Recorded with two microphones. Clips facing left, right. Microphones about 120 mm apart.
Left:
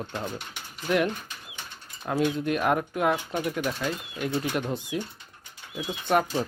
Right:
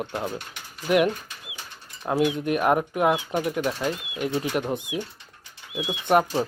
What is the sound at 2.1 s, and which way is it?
Speech, 10° right (ahead or behind).